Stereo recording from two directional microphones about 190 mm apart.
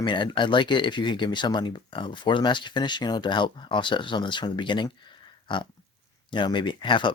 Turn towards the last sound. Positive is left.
turn(degrees=25)  # may be behind; listen again after turning